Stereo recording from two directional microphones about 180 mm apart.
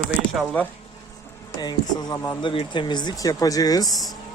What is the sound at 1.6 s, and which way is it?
Speech, 25° left (ahead or behind).